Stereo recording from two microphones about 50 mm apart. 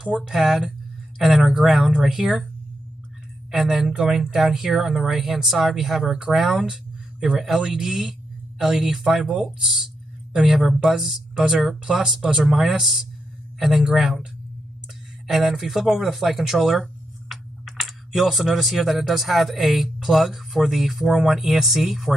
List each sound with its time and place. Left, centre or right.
0.0 s speech: centre
0.3 s speech: centre
3.5 s speech: centre
6.5 s a sound: centre
7.3 s speech: centre
10.8 s speech: centre
15.2 s speech: centre